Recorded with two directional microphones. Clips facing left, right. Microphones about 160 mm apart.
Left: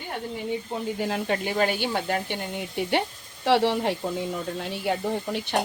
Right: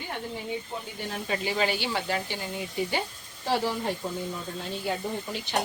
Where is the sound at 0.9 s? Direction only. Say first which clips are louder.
Left 4 dB; 90° left.